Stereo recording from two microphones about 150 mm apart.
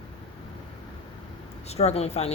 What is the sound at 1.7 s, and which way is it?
Speech, 45° left (ahead or behind).